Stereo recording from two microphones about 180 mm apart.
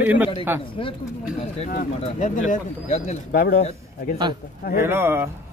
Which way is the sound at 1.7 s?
45° left (ahead or behind).